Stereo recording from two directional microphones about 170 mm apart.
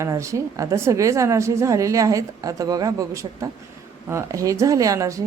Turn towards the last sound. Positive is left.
turn(degrees=-20)  # may be behind; listen again after turning